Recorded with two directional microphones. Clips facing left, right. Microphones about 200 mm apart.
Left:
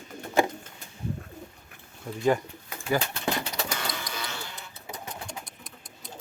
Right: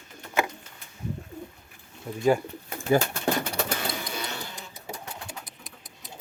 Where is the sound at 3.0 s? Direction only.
50° right (ahead or behind).